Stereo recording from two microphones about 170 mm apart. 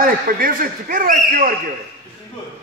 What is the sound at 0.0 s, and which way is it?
A man's voice, 55° right (ahead or behind).